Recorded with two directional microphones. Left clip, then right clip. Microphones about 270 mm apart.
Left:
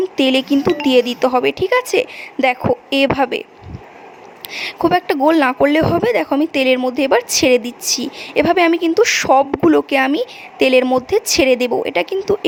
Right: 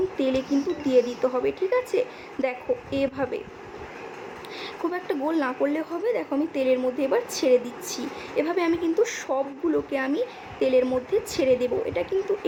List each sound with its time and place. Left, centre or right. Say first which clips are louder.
0.2 s speech: left 13 dB; left
4.6 s speech: left 14 dB; left